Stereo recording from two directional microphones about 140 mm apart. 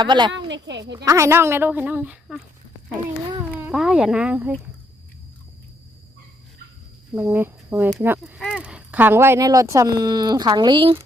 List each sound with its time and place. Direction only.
0.0 s a woman's voice: 35° right (ahead or behind)
0.9 s speech: 25° right (ahead or behind)
3.6 s speech: 5° right (ahead or behind)
7.2 s speech: 15° right (ahead or behind); by 10.9 s 35° right (ahead or behind)